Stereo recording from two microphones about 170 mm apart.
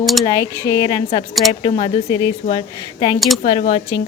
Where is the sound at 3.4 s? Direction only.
35° left (ahead or behind).